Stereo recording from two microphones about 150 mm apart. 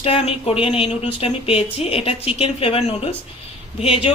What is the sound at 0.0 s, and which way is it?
Speech, 40° left (ahead or behind).